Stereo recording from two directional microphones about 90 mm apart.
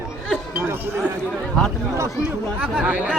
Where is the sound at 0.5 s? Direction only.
25° right (ahead or behind).